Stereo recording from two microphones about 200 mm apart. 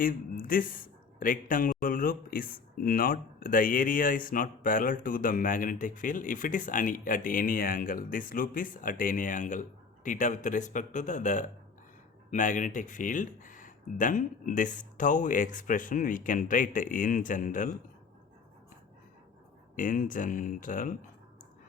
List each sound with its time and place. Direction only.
0.0 s a man's voice: 45° left (ahead or behind)
19.7 s speech: 40° left (ahead or behind)